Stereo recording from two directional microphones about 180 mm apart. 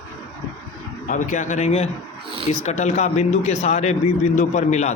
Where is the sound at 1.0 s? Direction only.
45° left (ahead or behind).